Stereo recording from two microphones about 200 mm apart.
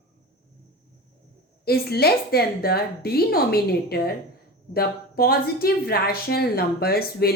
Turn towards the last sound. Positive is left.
turn(degrees=50)  # may be behind; listen again after turning